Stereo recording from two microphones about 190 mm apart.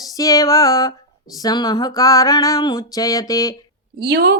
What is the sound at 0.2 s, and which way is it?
Music, 20° left (ahead or behind).